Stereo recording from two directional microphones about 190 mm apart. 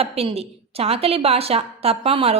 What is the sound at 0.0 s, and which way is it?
A woman's voice, 30° right (ahead or behind).